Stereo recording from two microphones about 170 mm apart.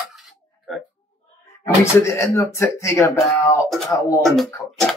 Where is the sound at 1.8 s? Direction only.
15° left (ahead or behind).